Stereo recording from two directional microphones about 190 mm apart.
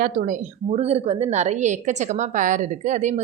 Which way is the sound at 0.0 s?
40° right (ahead or behind).